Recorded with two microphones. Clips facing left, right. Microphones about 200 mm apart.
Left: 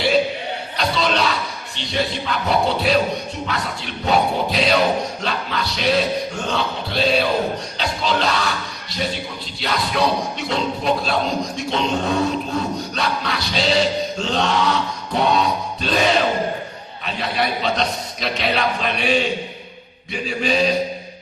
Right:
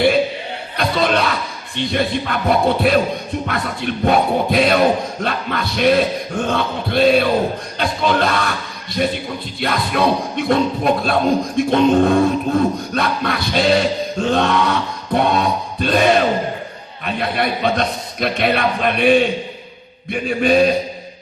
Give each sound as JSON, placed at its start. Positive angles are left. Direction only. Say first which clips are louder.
{"t": 0.8, "sound": "a sound", "louder": "right 3 dB", "side_deg": -55}
{"t": 3.4, "sound": "music", "louder": "right 4 dB", "side_deg": -55}
{"t": 7.8, "sound": "speech", "louder": "right 5 dB", "side_deg": -55}
{"t": 9.6, "sound": "music", "louder": "right 2 dB", "side_deg": -55}
{"t": 17.1, "sound": "a man's voice", "louder": "right 3 dB", "side_deg": -55}